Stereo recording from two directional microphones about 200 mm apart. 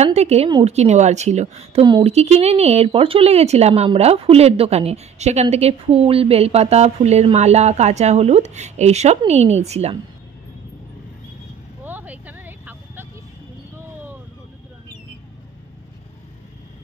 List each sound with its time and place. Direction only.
0.0 s a woman's voice: 30° right (ahead or behind)
11.8 s vehicle: 10° right (ahead or behind)